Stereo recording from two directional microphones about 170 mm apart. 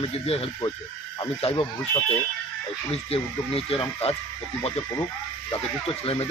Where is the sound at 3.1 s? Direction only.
35° left (ahead or behind).